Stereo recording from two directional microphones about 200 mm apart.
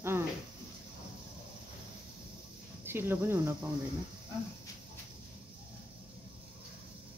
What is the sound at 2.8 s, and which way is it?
Speech, 10° right (ahead or behind).